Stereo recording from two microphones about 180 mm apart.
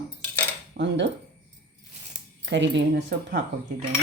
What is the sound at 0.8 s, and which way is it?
Speech, 60° right (ahead or behind).